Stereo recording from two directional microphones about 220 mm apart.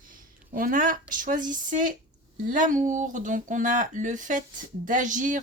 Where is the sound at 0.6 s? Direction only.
40° right (ahead or behind).